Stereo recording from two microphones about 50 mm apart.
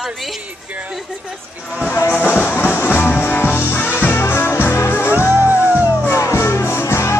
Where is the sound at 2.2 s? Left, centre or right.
Left.